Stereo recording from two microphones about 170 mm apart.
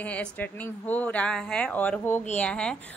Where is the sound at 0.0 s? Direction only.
10° left (ahead or behind).